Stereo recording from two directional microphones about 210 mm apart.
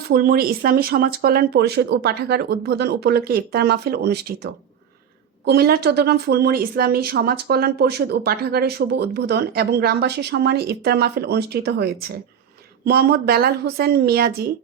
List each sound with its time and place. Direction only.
0.1 s speech: 45° right (ahead or behind)